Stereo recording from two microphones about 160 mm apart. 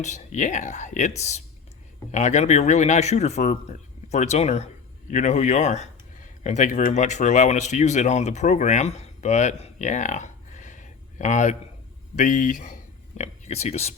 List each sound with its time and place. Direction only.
0.0 s speech: 45° left (ahead or behind)
2.1 s speech: 45° left (ahead or behind)